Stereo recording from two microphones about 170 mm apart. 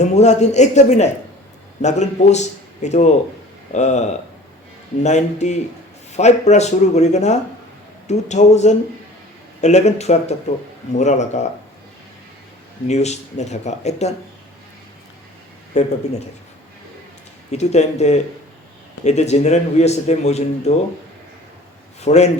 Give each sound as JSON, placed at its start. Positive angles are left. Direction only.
{"t": 0.0, "sound": "a man's voice", "side_deg": 40}
{"t": 12.9, "sound": "a man's voice", "side_deg": 40}
{"t": 15.7, "sound": "a man's voice", "side_deg": 40}
{"t": 17.5, "sound": "a man's voice", "side_deg": 40}
{"t": 22.0, "sound": "a man's voice", "side_deg": 40}